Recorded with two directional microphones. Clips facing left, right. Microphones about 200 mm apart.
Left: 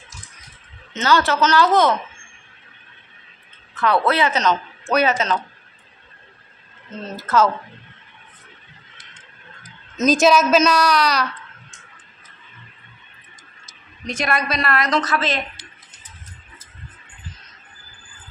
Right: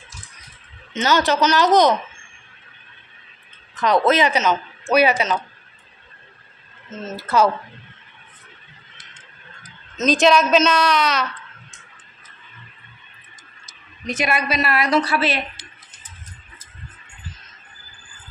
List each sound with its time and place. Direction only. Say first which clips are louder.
0.9 s a woman's voice: even; 15° right (ahead or behind)
3.7 s a woman's voice: right 2 dB; 15° right (ahead or behind)
6.9 s a woman's voice: left 1 dB; 5° right (ahead or behind)
10.2 s speech: even; 5° left (ahead or behind)
14.0 s a woman's voice: right 1 dB; 5° right (ahead or behind)